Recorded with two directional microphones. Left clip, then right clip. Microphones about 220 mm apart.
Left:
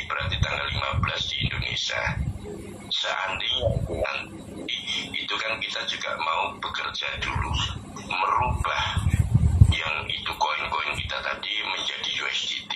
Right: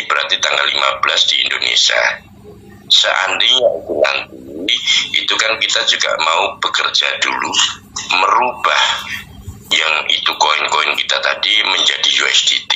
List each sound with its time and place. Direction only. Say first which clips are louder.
0.1 s speech: right 15 dB; 45° right (ahead or behind)